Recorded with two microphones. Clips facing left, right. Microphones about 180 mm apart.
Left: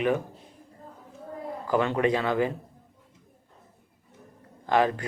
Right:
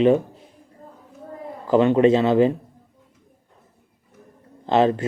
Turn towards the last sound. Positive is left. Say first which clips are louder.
# right 5 dB
turn(degrees=-25)  # may be behind; listen again after turning